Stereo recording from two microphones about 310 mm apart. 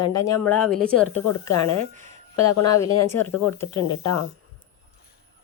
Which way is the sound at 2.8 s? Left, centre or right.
Centre.